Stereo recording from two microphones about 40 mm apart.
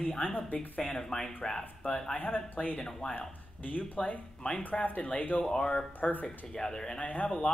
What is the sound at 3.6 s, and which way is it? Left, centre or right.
A man's voice, left.